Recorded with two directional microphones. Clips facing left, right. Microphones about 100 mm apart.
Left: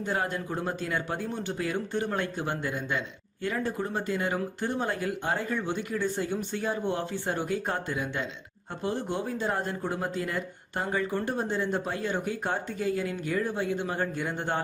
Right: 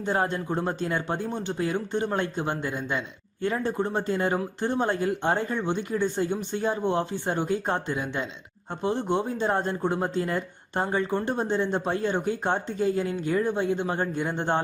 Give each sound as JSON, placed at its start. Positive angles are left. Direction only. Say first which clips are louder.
{"t": 0.0, "sound": "speech", "louder": "right 4 dB", "side_deg": -25}